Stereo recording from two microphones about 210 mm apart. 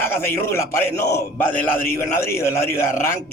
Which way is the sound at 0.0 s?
10° left (ahead or behind).